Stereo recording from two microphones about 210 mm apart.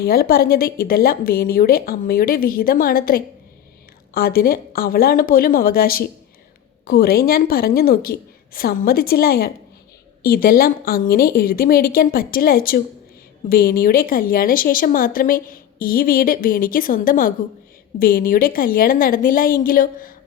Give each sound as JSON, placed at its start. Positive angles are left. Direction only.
{"t": 0.0, "sound": "a woman's voice", "side_deg": 45}